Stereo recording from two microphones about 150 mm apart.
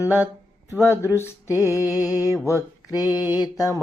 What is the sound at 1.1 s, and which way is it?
Mantra, 15° left (ahead or behind).